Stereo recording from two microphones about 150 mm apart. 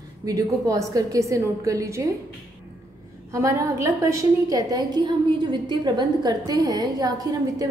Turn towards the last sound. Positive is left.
turn(degrees=-25)  # may be behind; listen again after turning